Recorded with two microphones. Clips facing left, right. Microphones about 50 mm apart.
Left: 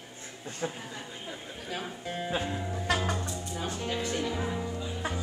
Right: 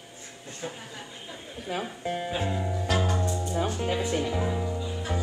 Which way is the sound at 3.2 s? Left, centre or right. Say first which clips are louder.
Right 7 dB; right.